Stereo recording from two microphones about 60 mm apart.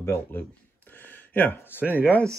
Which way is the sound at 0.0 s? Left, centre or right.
Left.